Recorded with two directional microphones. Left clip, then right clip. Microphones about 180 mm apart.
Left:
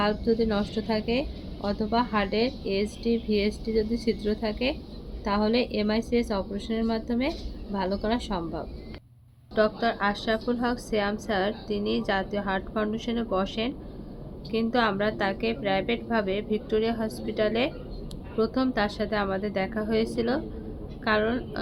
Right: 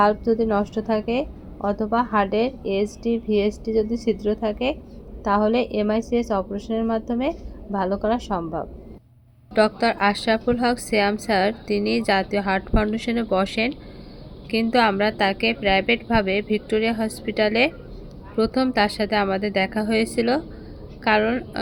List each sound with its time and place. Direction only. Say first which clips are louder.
0.3 s a woman's voice: right 5 dB; 10° right (ahead or behind)
9.6 s a woman's voice: right 5 dB; 30° right (ahead or behind)